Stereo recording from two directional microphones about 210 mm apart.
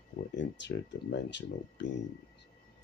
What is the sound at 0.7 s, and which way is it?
Speech, 60° left (ahead or behind).